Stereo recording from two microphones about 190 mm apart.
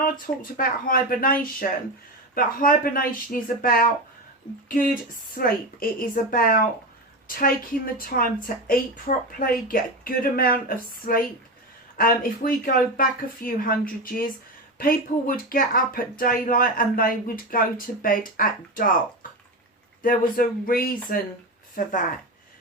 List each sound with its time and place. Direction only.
0.5 s speech: 50° left (ahead or behind)
20.0 s speech: 45° left (ahead or behind)